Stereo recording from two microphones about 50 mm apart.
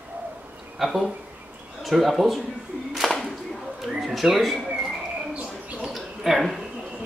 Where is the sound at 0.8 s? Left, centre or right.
Centre.